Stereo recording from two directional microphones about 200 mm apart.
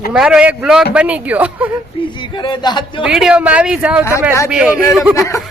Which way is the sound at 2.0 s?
25° left (ahead or behind).